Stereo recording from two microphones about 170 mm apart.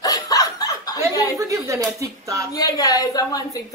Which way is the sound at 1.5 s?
20° right (ahead or behind).